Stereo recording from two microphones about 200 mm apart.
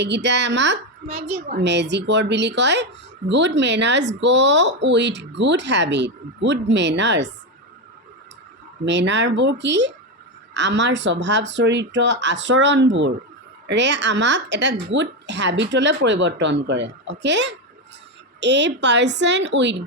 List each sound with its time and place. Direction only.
0.0 s speech: 60° right (ahead or behind)
8.8 s speech: 60° right (ahead or behind)